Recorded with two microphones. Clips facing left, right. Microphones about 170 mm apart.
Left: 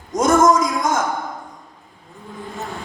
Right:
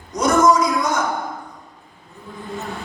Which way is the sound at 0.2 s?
50° left (ahead or behind).